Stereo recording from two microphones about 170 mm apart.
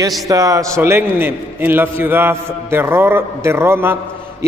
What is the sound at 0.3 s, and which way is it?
A man's voice, 20° right (ahead or behind).